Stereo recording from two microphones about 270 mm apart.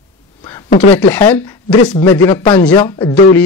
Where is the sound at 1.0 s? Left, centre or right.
Centre.